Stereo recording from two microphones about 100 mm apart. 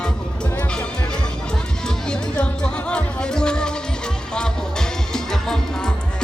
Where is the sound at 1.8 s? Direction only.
10° left (ahead or behind).